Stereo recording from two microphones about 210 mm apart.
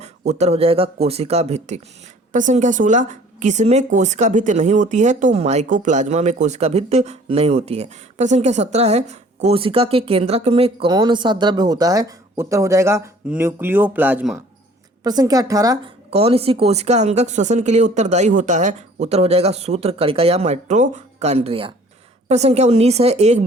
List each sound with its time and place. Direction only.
0.0 s a woman's voice: 30° right (ahead or behind); by 15.8 s 15° right (ahead or behind)
16.0 s a woman's voice: 30° right (ahead or behind)